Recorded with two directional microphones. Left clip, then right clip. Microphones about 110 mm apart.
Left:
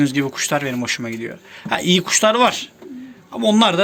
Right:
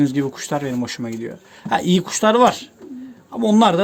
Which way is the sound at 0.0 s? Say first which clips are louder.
Left 1 dB; 35° right (ahead or behind).